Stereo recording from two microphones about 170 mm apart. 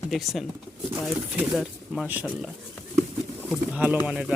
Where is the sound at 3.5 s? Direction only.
10° right (ahead or behind).